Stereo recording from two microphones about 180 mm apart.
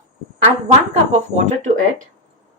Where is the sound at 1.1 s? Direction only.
40° right (ahead or behind).